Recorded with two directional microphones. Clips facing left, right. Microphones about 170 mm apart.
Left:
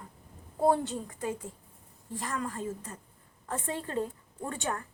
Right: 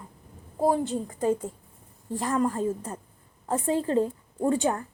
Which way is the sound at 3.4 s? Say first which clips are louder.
Right 9 dB; 35° right (ahead or behind).